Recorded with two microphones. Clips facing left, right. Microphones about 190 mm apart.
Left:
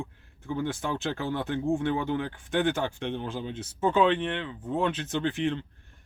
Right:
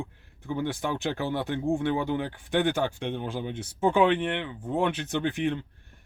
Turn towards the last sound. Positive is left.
turn(degrees=-15)  # may be behind; listen again after turning